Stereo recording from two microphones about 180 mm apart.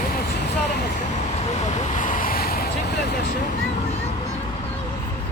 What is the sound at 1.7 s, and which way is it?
Vehicle, 45° left (ahead or behind).